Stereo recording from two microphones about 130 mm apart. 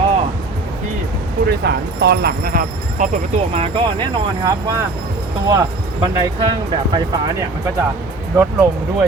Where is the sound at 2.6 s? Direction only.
75° right (ahead or behind).